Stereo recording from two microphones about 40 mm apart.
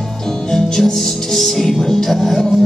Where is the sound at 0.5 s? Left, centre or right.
Centre.